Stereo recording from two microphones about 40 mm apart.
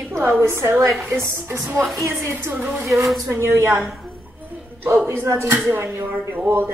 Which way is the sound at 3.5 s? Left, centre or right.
Right.